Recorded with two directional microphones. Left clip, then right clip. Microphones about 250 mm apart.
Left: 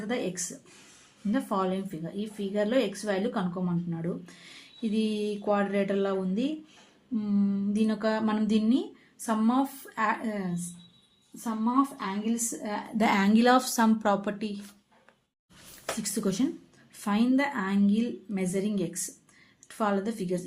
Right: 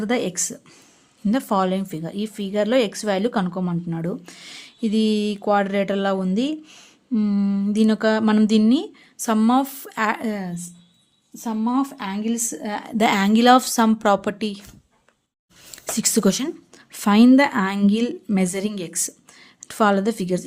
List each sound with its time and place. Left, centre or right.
0.1 s a woman's voice: right
11.4 s a woman's voice: right
13.1 s a woman's voice: right
16.0 s a woman's voice: right